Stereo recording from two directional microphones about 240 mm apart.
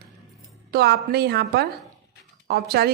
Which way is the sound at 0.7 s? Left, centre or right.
Right.